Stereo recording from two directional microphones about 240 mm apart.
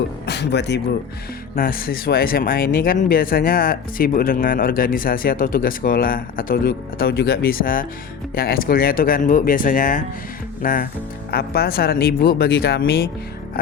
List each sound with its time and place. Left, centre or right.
0.3 s speech: left